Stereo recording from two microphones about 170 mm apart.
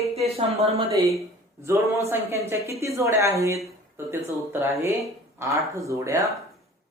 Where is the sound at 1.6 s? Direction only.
15° right (ahead or behind).